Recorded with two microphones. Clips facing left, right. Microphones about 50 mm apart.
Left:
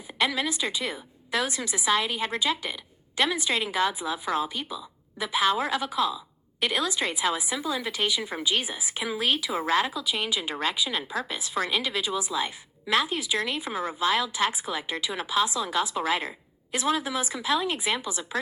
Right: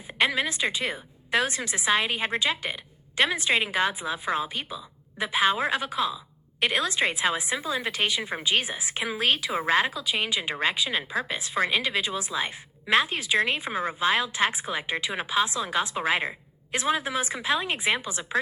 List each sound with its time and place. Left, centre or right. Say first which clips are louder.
0.1 s a woman's voice: right 2 dB; right